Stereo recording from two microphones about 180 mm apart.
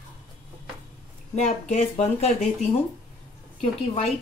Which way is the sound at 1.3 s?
40° left (ahead or behind).